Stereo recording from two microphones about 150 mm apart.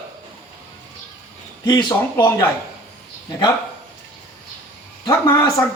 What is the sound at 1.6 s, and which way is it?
Speech, 25° left (ahead or behind).